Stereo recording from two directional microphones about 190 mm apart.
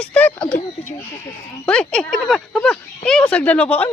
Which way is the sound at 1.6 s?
5° left (ahead or behind).